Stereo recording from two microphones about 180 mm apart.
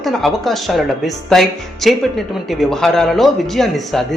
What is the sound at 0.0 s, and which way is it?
Speech, centre (ahead or behind).